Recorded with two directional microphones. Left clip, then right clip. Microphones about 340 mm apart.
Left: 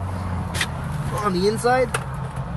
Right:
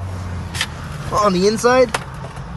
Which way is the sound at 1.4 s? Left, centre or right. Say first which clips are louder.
Right 3 dB; centre.